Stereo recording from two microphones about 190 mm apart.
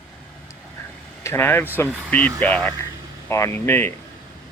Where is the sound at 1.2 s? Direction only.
10° left (ahead or behind).